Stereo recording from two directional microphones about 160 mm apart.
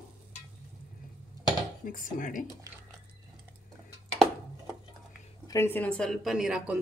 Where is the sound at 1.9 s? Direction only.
55° left (ahead or behind).